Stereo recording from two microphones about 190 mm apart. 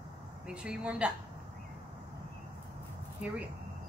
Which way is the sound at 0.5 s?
5° right (ahead or behind).